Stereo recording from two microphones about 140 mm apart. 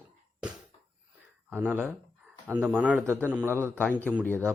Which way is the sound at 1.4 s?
15° right (ahead or behind).